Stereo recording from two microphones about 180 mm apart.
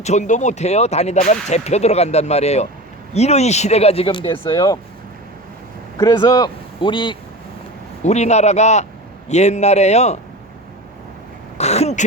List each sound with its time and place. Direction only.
0.0 s speech: 40° left (ahead or behind); by 4.8 s 25° left (ahead or behind)
6.0 s a man's voice: 15° left (ahead or behind)
8.0 s speech: 40° left (ahead or behind)
11.5 s a sound: 35° left (ahead or behind)